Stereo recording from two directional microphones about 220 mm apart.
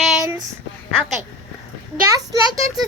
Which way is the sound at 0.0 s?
Centre (ahead or behind).